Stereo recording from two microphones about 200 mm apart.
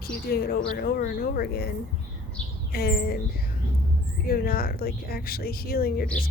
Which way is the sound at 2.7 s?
50° left (ahead or behind).